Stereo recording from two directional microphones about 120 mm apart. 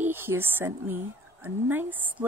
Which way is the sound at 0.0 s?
20° right (ahead or behind).